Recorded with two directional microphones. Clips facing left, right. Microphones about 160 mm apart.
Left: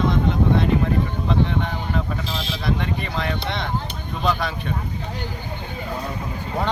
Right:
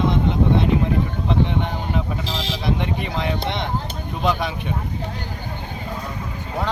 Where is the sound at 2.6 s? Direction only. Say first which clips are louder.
Right 1 dB; 20° right (ahead or behind).